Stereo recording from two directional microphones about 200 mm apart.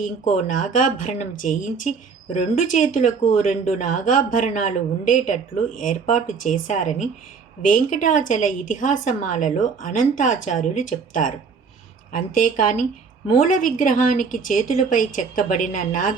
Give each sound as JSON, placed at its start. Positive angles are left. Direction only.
{"t": 0.0, "sound": "speech", "side_deg": 40}